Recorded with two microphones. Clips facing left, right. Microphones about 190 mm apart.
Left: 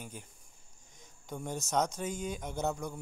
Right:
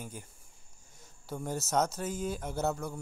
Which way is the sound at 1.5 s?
5° right (ahead or behind).